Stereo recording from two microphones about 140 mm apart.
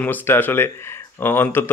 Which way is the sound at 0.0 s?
15° left (ahead or behind).